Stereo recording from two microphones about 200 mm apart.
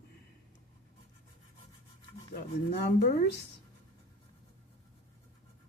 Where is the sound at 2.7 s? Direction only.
50° left (ahead or behind).